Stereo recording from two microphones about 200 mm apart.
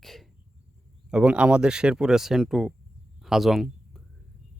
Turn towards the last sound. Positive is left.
turn(degrees=0)  # may be behind; listen again after turning